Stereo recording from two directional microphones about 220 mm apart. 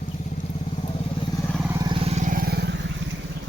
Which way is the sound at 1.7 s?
20° right (ahead or behind).